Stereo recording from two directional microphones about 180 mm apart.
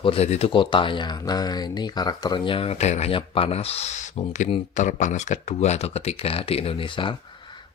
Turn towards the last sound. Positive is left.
turn(degrees=25)  # may be behind; listen again after turning